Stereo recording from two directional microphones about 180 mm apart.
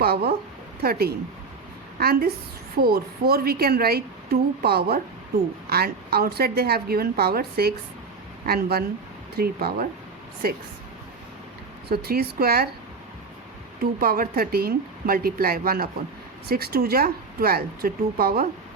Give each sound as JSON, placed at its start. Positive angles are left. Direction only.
{"t": 0.0, "sound": "speech", "side_deg": -60}
{"t": 11.9, "sound": "speech", "side_deg": -60}
{"t": 14.0, "sound": "speech", "side_deg": -55}